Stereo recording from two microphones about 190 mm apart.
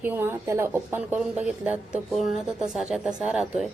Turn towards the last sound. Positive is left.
turn(degrees=-5)  # may be behind; listen again after turning